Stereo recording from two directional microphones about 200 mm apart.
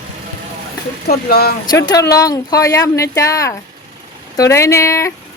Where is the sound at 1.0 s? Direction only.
50° left (ahead or behind).